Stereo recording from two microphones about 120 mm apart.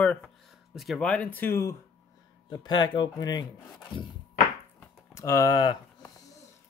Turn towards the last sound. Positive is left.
turn(degrees=30)  # may be behind; listen again after turning